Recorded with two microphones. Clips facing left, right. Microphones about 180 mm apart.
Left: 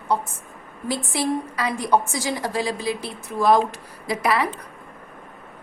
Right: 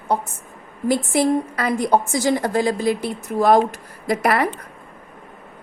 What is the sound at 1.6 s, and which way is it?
A woman's voice, 50° right (ahead or behind).